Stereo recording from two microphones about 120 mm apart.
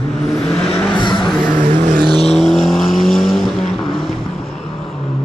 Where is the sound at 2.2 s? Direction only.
Centre (ahead or behind).